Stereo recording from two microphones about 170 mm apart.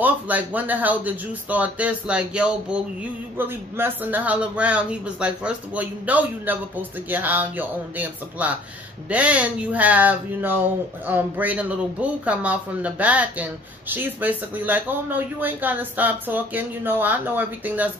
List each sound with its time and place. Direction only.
0.0 s speech: 10° right (ahead or behind)